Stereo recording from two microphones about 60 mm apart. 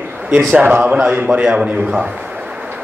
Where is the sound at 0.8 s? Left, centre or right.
Centre.